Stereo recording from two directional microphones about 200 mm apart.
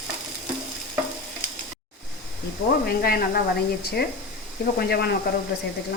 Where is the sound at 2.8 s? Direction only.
50° left (ahead or behind).